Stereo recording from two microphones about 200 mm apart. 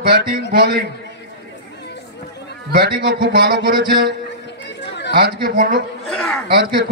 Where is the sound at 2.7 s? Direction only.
55° right (ahead or behind).